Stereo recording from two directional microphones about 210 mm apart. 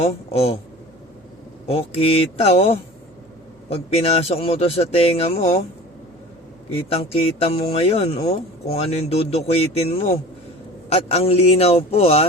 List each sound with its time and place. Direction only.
0.3 s speech: 30° left (ahead or behind)
1.6 s speech: 25° left (ahead or behind)
6.7 s speech: 25° left (ahead or behind)